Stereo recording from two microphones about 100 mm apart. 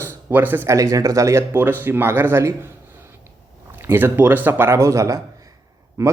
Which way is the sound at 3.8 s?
25° right (ahead or behind).